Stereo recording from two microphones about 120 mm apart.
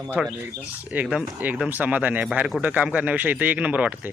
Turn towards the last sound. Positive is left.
turn(degrees=-10)  # may be behind; listen again after turning